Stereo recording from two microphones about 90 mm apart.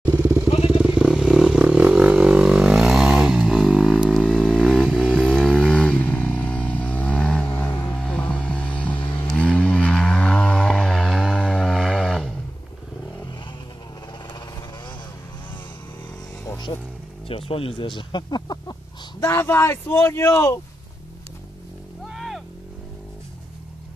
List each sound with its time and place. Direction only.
0.1 s motorcycle: 30° right (ahead or behind)
0.7 s motorcycle: 20° right (ahead or behind)
0.9 s vehicle: 5° right (ahead or behind)
4.1 s vehicle: 10° left (ahead or behind)
8.0 s music: 10° left (ahead or behind)
9.4 s a sound: 15° left (ahead or behind)
11.3 s chainsaw: 10° left (ahead or behind)
11.6 s a sound: 5° left (ahead or behind)
16.7 s music: 60° left (ahead or behind)
17.3 s a sound: 90° left; by 18.8 s 50° left (ahead or behind)
19.1 s speech: 30° left (ahead or behind)
22.0 s a sound: centre (ahead or behind)